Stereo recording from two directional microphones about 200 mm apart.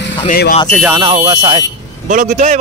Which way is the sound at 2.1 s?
40° right (ahead or behind).